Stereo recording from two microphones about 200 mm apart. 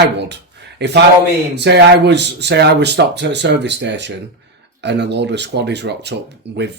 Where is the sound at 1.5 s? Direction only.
55° right (ahead or behind).